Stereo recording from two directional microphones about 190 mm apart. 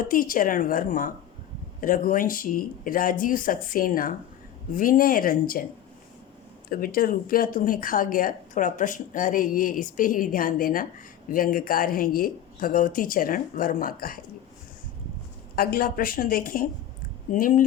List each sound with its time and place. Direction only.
0.0 s speech: 45° left (ahead or behind)
6.7 s speech: 50° left (ahead or behind)
15.5 s speech: 50° left (ahead or behind)